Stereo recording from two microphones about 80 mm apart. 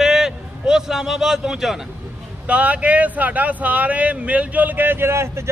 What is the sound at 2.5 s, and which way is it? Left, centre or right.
A man's voice, centre.